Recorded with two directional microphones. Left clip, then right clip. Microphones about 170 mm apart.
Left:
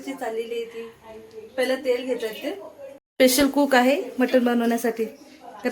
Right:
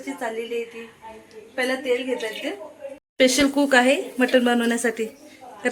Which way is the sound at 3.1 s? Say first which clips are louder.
Even; 15° left (ahead or behind).